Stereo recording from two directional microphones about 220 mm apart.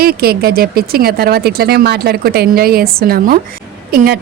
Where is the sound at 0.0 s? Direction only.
45° right (ahead or behind).